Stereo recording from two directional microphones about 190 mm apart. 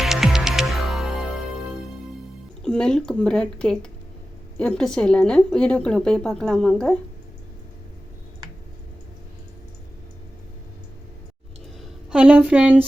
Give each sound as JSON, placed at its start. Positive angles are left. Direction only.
{"t": 0.0, "sound": "music", "side_deg": 0}
{"t": 2.6, "sound": "a woman's voice", "side_deg": 5}
{"t": 12.1, "sound": "a woman's voice", "side_deg": -5}